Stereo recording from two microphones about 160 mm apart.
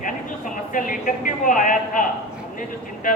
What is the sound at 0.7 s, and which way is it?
A man's voice, 55° left (ahead or behind).